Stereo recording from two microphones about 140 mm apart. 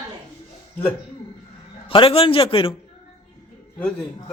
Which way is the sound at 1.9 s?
40° left (ahead or behind).